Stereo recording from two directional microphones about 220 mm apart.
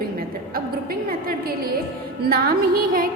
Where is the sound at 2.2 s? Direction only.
45° right (ahead or behind).